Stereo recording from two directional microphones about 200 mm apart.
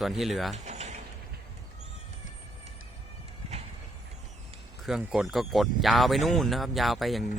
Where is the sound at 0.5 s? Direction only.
35° right (ahead or behind).